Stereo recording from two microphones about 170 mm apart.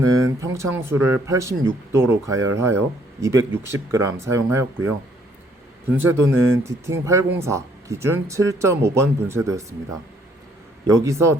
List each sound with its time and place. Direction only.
0.0 s speech: 20° right (ahead or behind)
6.0 s speech: 15° right (ahead or behind)
10.8 s speech: 20° right (ahead or behind)